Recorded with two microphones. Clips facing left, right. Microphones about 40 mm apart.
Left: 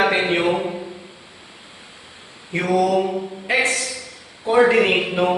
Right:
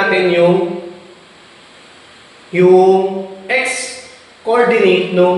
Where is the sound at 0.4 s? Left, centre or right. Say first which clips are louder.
Right 9 dB; centre.